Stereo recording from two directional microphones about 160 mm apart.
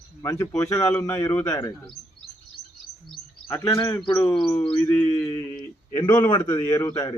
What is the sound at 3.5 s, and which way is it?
Speech, 20° left (ahead or behind).